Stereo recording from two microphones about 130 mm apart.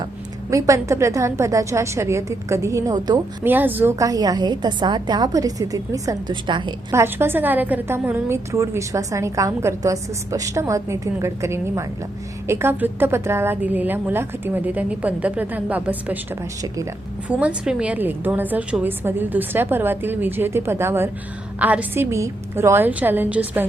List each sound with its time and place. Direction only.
0.5 s a woman's voice: 25° right (ahead or behind)
3.4 s a woman's voice: 15° right (ahead or behind)
3.9 s a woman's voice: 25° right (ahead or behind)
6.5 s a woman's voice: 40° right (ahead or behind)
6.9 s a woman's voice: 20° right (ahead or behind)